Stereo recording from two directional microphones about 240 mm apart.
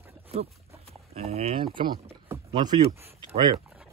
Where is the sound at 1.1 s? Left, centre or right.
Right.